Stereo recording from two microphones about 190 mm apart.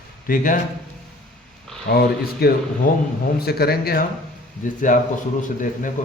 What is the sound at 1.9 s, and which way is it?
A man's voice, 55° left (ahead or behind).